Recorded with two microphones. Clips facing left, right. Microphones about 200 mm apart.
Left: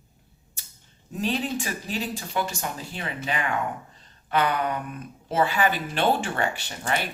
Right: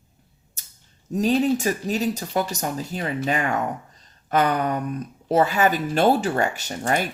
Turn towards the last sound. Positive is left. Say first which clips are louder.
# right 5 dB
turn(degrees=-45)  # may be behind; listen again after turning